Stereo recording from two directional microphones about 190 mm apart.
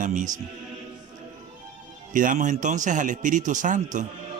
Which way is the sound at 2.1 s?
45° right (ahead or behind).